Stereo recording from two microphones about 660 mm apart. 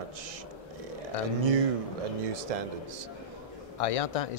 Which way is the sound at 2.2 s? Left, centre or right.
Right.